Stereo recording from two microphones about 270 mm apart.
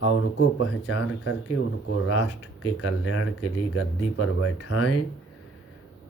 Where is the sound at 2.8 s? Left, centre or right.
Left.